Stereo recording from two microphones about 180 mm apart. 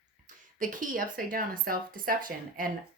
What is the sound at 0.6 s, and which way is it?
Speech, 45° right (ahead or behind).